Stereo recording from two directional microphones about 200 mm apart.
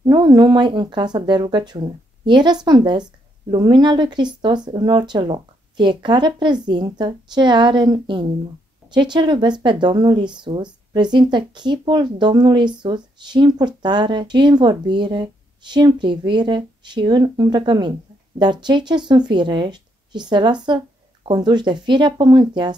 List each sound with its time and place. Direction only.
0.0 s speech: 20° right (ahead or behind)